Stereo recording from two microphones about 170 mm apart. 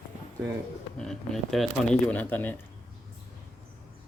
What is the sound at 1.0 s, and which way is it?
A man's voice, centre (ahead or behind).